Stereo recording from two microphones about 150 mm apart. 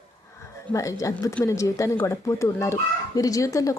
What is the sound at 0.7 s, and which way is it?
A child's voice, 20° left (ahead or behind).